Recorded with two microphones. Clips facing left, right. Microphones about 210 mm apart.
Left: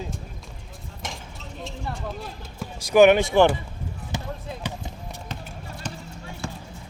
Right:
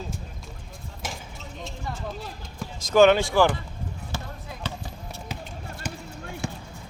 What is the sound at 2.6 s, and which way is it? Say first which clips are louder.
Speech: left 2 dB; 15° left (ahead or behind).